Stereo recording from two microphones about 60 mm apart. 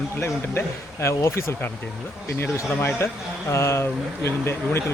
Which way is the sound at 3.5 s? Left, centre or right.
Left.